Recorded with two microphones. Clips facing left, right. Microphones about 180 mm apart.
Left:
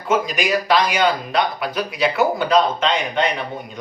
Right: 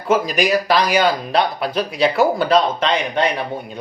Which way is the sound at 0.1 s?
40° right (ahead or behind).